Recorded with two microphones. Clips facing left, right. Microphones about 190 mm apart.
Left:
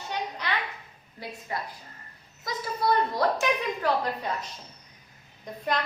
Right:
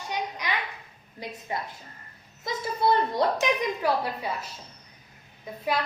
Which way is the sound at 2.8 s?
25° right (ahead or behind).